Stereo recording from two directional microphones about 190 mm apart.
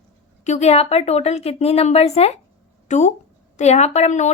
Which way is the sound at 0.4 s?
35° left (ahead or behind).